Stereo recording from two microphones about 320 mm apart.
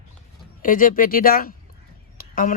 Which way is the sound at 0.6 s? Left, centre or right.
Left.